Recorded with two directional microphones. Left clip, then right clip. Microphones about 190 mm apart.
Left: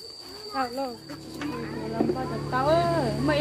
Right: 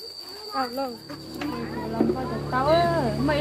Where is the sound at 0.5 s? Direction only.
15° left (ahead or behind).